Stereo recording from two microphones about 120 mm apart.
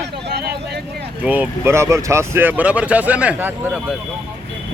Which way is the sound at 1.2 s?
15° right (ahead or behind).